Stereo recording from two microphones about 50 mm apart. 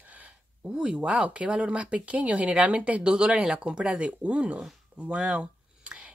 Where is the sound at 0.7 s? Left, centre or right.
Centre.